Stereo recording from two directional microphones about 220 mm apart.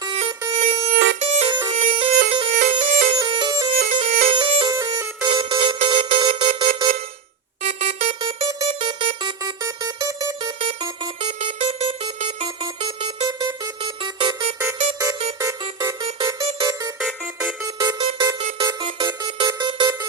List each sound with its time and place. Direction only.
0.2 s a sound: 25° right (ahead or behind)
1.2 s music: 30° right (ahead or behind)
3.2 s music: 20° right (ahead or behind)
3.8 s music: 35° right (ahead or behind)
7.6 s a sound: 30° right (ahead or behind)
15.4 s music: 15° right (ahead or behind)
17.0 s music: centre (ahead or behind)
17.7 s music: 20° right (ahead or behind)